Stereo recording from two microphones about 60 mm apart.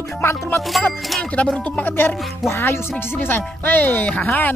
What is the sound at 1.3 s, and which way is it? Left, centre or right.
Speech, centre.